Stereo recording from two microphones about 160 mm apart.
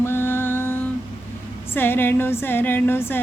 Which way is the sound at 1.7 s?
15° left (ahead or behind).